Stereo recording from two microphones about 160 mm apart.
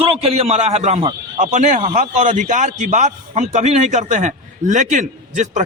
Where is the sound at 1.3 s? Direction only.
50° right (ahead or behind).